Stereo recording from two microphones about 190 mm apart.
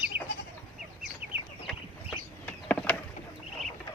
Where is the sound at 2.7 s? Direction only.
5° left (ahead or behind).